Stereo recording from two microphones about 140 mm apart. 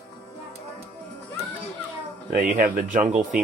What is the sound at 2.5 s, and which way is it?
Speech, 65° right (ahead or behind).